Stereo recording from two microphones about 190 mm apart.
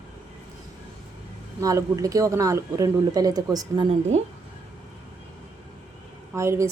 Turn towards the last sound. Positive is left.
turn(degrees=-15)  # may be behind; listen again after turning